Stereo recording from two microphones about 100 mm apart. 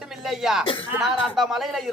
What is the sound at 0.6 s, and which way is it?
Speech, 60° left (ahead or behind).